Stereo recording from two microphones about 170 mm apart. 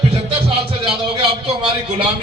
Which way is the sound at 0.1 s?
35° right (ahead or behind).